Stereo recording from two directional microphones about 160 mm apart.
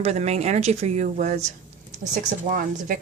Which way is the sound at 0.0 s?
45° right (ahead or behind).